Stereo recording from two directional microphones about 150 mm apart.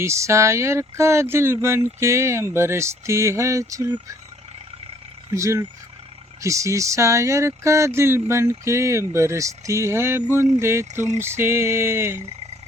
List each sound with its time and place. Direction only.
0.0 s speech: 20° right (ahead or behind)
5.3 s speech: 20° right (ahead or behind)
10.3 s a sound: 15° right (ahead or behind)